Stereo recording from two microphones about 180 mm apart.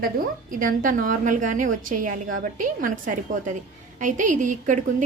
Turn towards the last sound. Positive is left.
turn(degrees=-45)  # may be behind; listen again after turning